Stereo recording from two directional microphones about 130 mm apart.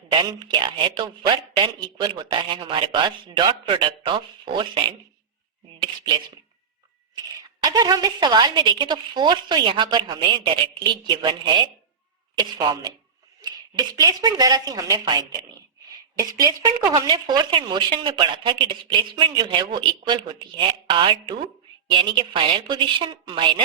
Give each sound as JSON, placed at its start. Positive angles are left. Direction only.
{"t": 0.1, "sound": "speech", "side_deg": -35}
{"t": 7.6, "sound": "a woman's voice", "side_deg": -30}